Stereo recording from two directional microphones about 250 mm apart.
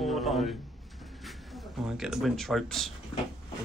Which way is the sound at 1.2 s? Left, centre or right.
Centre.